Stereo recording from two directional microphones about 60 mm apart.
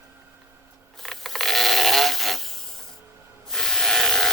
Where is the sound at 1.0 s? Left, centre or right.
Centre.